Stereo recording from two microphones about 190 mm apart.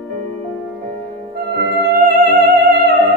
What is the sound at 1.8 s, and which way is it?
Music, 55° right (ahead or behind).